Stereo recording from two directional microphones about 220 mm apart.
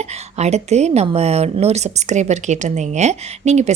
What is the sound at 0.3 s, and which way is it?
Speech, 30° right (ahead or behind).